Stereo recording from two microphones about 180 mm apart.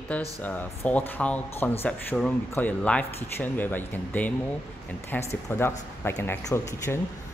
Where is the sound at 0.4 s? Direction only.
10° left (ahead or behind).